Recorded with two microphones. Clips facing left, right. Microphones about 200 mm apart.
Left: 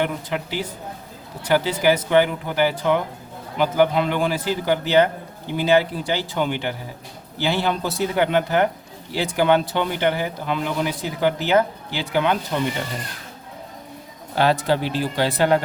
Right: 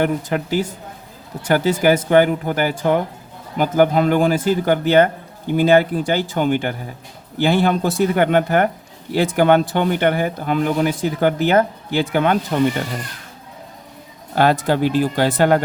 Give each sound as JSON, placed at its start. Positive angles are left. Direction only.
{"t": 0.0, "sound": "a man's voice", "side_deg": -45}
{"t": 14.3, "sound": "a man's voice", "side_deg": -50}